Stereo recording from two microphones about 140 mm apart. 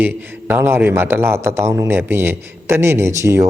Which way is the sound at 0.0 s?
15° right (ahead or behind).